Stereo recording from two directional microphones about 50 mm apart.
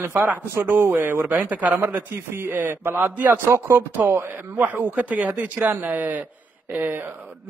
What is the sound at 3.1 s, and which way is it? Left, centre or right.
Speech, right.